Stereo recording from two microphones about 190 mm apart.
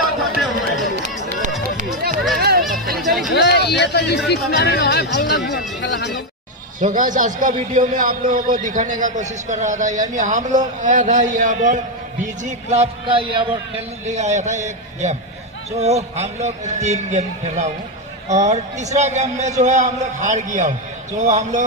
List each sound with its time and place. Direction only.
0.2 s a sound: centre (ahead or behind)
2.3 s music: 55° right (ahead or behind)
3.0 s music: centre (ahead or behind)
3.3 s a sound: 60° left (ahead or behind)
4.3 s speech: 60° left (ahead or behind)
6.8 s a man's voice: 45° right (ahead or behind); by 13.4 s 25° right (ahead or behind)
14.0 s a man's voice: 35° right (ahead or behind)